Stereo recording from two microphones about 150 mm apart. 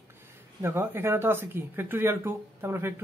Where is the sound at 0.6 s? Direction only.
15° right (ahead or behind).